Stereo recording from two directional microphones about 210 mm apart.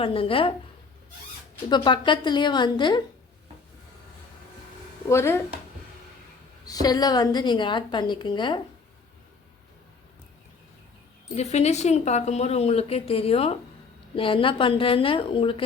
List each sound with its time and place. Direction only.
0.0 s a woman's voice: 25° left (ahead or behind)
1.7 s a woman's voice: 20° left (ahead or behind)
5.0 s speech: 10° left (ahead or behind)
6.7 s a woman's voice: 20° left (ahead or behind)
11.3 s a woman's voice: 30° left (ahead or behind)